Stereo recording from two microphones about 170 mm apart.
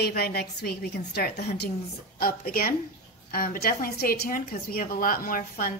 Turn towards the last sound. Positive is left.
turn(degrees=55)  # may be behind; listen again after turning